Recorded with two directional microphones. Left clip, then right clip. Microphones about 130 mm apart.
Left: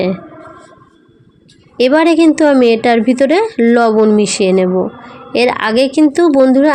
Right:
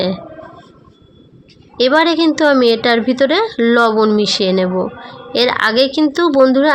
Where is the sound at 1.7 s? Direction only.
15° left (ahead or behind).